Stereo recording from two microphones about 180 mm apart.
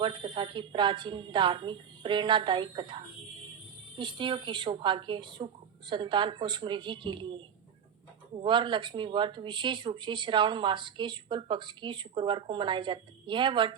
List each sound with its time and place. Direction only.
0.0 s speech: 25° right (ahead or behind)